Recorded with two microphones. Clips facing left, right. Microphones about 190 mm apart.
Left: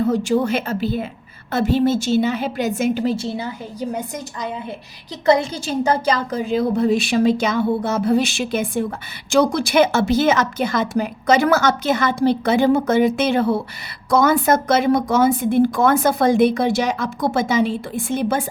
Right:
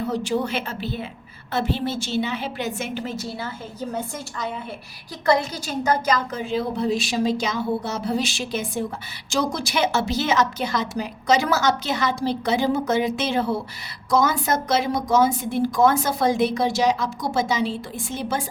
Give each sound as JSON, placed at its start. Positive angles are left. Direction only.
{"t": 0.0, "sound": "a woman's voice", "side_deg": 45}